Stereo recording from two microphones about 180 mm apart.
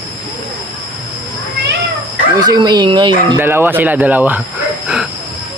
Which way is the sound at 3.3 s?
10° right (ahead or behind).